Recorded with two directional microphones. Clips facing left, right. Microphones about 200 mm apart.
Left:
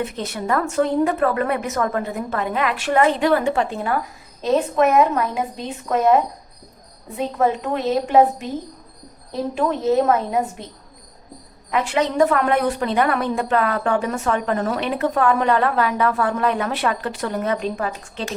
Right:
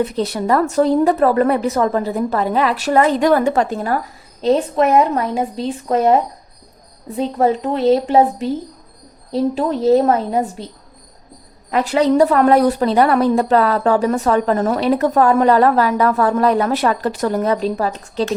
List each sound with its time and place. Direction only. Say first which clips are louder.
0.0 s speech: right 7 dB; 35° right (ahead or behind)
7.2 s speech: right 4 dB; 30° right (ahead or behind)
11.7 s speech: right 6 dB; 35° right (ahead or behind)